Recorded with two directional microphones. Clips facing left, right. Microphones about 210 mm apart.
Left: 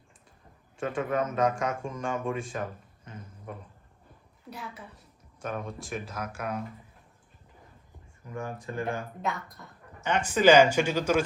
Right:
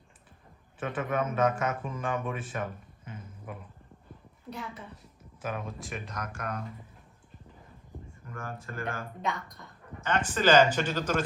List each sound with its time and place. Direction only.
0.8 s a man's voice: 5° right (ahead or behind)
5.4 s a man's voice: 5° right (ahead or behind)
8.3 s speech: 15° left (ahead or behind)
9.2 s a man's voice: 5° left (ahead or behind)